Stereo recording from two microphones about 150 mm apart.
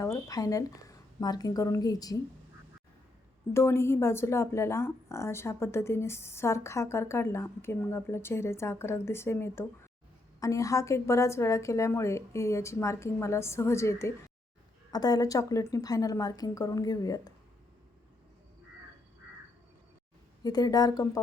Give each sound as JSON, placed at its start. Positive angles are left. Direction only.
{"t": 0.0, "sound": "a woman's voice", "side_deg": 20}
{"t": 3.5, "sound": "a woman's voice", "side_deg": 15}
{"t": 20.4, "sound": "a woman's voice", "side_deg": 25}